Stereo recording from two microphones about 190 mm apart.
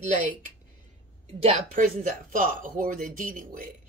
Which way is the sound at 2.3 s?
45° right (ahead or behind).